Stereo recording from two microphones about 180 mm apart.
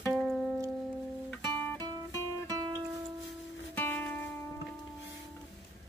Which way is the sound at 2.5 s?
20° right (ahead or behind).